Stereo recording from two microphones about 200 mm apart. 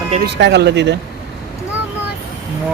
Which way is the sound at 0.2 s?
60° right (ahead or behind).